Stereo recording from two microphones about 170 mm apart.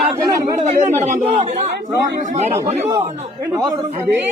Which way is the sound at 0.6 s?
45° right (ahead or behind).